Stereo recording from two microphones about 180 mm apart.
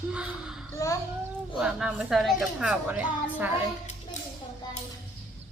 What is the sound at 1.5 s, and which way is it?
Speech, 5° right (ahead or behind).